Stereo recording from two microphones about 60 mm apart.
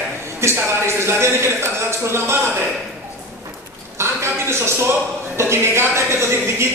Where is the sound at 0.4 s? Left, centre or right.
Right.